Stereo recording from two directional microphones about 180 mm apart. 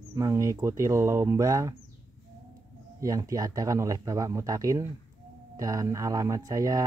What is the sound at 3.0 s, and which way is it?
Speech, 20° right (ahead or behind).